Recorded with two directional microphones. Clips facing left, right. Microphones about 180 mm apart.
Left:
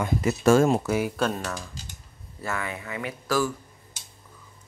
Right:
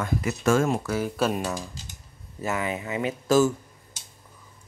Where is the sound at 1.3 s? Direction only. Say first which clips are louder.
Right 4 dB; 15° right (ahead or behind).